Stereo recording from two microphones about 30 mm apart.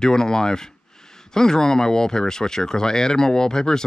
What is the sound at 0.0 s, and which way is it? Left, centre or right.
Speech, left.